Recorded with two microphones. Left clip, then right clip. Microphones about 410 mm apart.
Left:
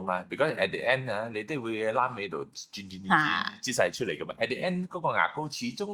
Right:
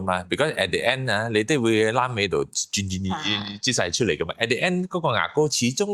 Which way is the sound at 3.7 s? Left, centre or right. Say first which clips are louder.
Right 7 dB; right.